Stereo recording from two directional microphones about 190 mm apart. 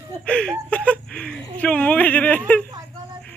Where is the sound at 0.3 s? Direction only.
5° left (ahead or behind).